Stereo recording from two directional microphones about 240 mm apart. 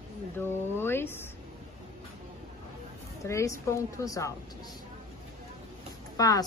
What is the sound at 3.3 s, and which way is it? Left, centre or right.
Speech, centre.